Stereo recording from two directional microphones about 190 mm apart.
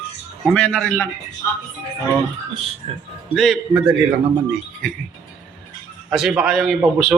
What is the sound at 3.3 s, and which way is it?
Speech, centre (ahead or behind).